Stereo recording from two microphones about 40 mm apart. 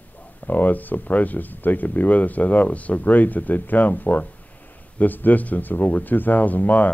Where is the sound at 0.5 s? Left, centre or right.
Left.